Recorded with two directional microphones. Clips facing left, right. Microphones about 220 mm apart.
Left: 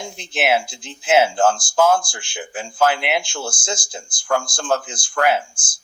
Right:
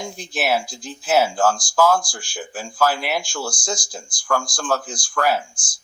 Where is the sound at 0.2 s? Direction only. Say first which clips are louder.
Left 3 dB; 25° left (ahead or behind).